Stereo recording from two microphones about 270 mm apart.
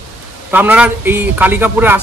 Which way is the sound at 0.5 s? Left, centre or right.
Centre.